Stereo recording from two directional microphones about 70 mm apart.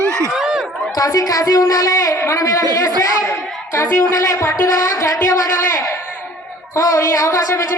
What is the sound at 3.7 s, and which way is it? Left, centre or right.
Speech, left.